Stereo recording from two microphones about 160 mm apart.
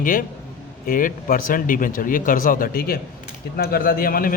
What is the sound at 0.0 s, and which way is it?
A man's voice, 60° left (ahead or behind).